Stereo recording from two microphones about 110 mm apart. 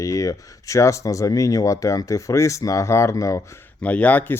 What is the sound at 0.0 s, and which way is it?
Speech, 30° left (ahead or behind).